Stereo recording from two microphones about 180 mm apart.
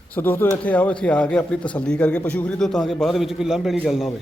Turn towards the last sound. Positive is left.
turn(degrees=0)  # may be behind; listen again after turning